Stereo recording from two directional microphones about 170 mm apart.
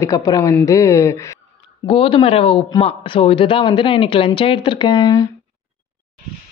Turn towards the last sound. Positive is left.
turn(degrees=25)  # may be behind; listen again after turning